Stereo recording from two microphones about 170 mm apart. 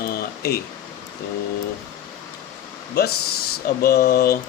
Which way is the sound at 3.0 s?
70° left (ahead or behind).